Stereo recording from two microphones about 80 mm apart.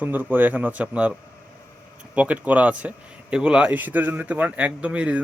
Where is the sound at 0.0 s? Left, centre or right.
Right.